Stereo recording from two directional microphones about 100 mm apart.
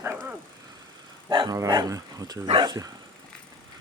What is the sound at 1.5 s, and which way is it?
Speech, 40° right (ahead or behind).